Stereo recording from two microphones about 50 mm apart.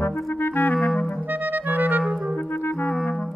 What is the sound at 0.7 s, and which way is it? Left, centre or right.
Clarinet, centre.